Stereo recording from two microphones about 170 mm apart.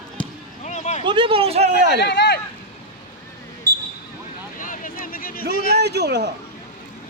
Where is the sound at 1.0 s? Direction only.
30° right (ahead or behind).